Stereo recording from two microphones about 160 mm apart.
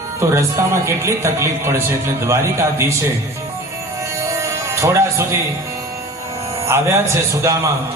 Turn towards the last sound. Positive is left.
turn(degrees=-20)  # may be behind; listen again after turning